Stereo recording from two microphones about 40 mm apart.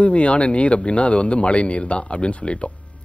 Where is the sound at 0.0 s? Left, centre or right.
Left.